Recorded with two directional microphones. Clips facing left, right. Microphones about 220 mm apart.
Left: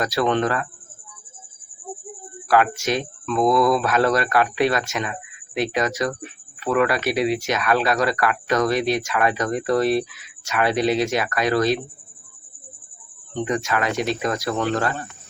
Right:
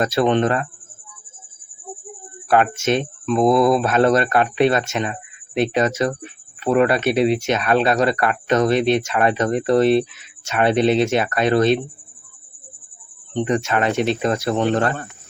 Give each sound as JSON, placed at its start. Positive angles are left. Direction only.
{"t": 0.0, "sound": "speech", "side_deg": -25}
{"t": 2.5, "sound": "speech", "side_deg": -25}
{"t": 13.3, "sound": "speech", "side_deg": -25}